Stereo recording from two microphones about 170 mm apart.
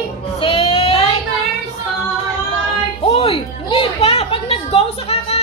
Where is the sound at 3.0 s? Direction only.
35° left (ahead or behind).